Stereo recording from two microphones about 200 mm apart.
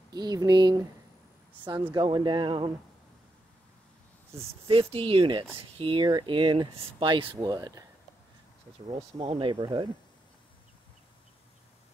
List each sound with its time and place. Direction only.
0.1 s speech: 20° right (ahead or behind)
4.4 s speech: 30° right (ahead or behind)
8.8 s speech: 25° right (ahead or behind)